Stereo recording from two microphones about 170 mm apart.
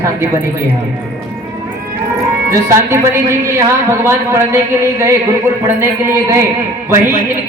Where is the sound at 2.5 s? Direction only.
15° right (ahead or behind).